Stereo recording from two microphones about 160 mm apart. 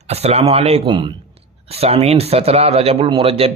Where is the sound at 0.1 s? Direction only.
40° right (ahead or behind).